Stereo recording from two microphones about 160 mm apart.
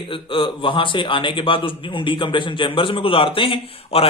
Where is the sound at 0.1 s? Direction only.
30° left (ahead or behind).